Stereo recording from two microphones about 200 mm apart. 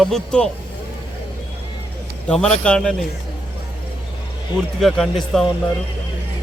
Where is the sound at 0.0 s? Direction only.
5° left (ahead or behind).